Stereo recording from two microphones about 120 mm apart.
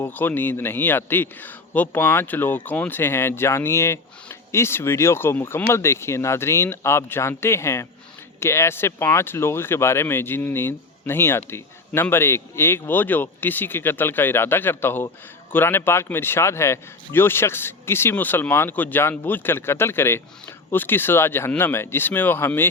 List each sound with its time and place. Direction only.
0.0 s speech: 15° left (ahead or behind)